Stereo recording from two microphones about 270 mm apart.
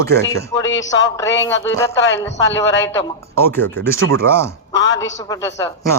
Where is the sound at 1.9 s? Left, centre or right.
Left.